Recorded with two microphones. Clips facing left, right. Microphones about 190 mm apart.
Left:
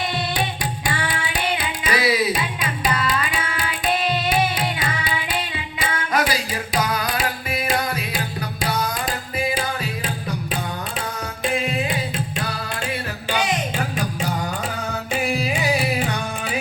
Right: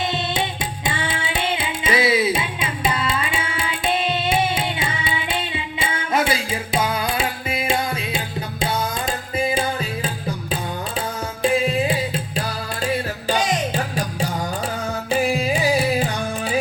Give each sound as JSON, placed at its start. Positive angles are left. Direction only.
{"t": 0.9, "sound": "music", "side_deg": -25}
{"t": 12.4, "sound": "music", "side_deg": -35}
{"t": 15.3, "sound": "carnatic music", "side_deg": -35}